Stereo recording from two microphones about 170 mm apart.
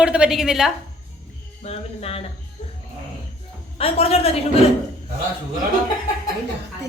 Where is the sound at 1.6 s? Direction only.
35° left (ahead or behind).